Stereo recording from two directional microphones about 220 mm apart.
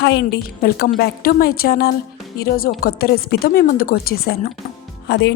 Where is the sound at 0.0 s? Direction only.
50° left (ahead or behind).